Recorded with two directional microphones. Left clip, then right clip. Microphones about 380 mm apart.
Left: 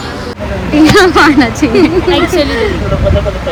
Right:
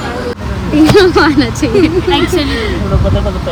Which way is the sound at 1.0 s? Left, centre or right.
Centre.